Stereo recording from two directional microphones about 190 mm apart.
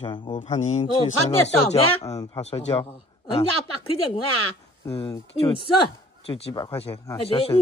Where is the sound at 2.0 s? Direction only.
20° left (ahead or behind).